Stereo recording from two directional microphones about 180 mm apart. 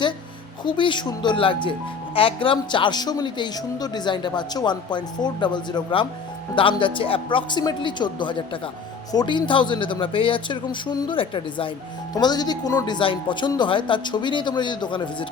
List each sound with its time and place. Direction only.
0.6 s speech: 25° left (ahead or behind)